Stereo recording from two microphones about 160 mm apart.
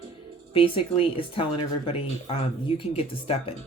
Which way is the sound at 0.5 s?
35° left (ahead or behind).